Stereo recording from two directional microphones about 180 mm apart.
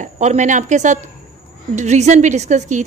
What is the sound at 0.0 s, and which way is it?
A woman's voice, 40° right (ahead or behind).